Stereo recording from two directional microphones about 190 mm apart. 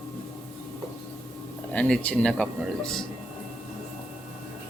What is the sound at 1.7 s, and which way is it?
Speech, 5° left (ahead or behind).